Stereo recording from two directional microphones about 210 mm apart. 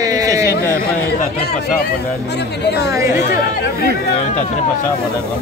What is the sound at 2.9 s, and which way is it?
Speech, 15° right (ahead or behind).